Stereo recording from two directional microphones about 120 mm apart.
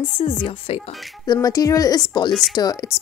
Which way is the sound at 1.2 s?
30° left (ahead or behind).